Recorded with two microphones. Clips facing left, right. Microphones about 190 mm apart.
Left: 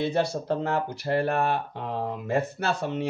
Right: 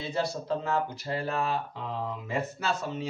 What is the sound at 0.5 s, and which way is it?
Speech, 60° left (ahead or behind).